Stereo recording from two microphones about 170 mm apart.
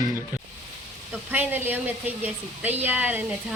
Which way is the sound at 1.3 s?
10° right (ahead or behind).